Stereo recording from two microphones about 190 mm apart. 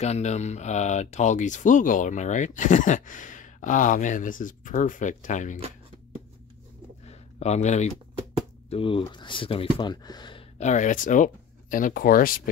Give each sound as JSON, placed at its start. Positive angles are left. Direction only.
{"t": 0.0, "sound": "speech", "side_deg": 35}
{"t": 7.1, "sound": "a sound", "side_deg": 35}
{"t": 8.6, "sound": "speech", "side_deg": 30}
{"t": 10.6, "sound": "speech", "side_deg": 40}